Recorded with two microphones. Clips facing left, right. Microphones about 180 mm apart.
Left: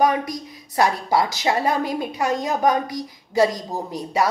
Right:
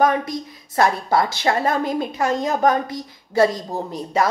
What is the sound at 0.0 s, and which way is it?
A woman's voice, 15° left (ahead or behind).